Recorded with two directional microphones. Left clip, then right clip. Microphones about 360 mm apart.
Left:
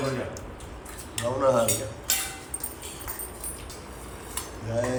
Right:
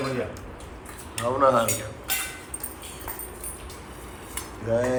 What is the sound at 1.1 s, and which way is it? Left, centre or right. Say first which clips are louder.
Speech: right 3 dB; centre.